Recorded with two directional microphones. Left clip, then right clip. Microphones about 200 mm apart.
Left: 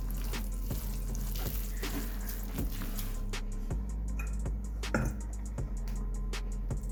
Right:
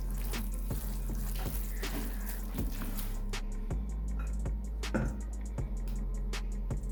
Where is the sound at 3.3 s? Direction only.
Centre (ahead or behind).